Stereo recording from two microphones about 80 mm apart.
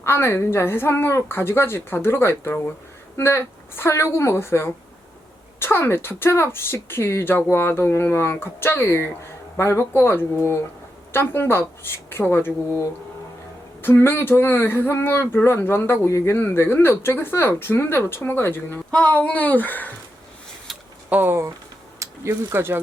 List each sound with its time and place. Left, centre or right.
0.0 s a woman's voice: left
13.8 s speech: left
18.9 s speech: centre
21.1 s speech: right
21.9 s mechanisms: right
22.5 s speech: right